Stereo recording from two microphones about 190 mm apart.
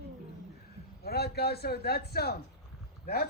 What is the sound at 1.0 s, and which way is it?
A man's voice, 55° left (ahead or behind).